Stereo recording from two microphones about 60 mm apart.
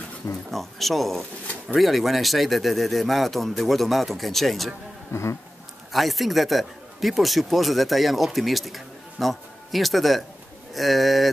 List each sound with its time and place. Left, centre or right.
0.5 s a man's voice: centre
5.1 s speech: left
5.9 s a man's voice: centre